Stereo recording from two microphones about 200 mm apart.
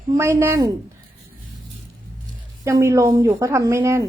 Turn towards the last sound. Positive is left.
turn(degrees=-15)  # may be behind; listen again after turning